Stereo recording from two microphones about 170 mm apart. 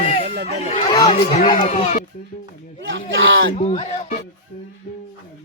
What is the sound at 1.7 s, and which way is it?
Speech, 40° left (ahead or behind).